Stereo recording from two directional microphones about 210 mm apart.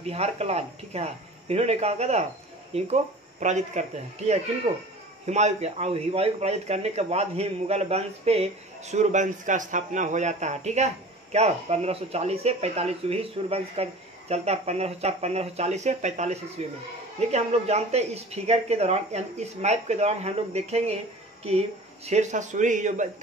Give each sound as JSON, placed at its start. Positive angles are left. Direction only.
{"t": 0.0, "sound": "a man's voice", "side_deg": -30}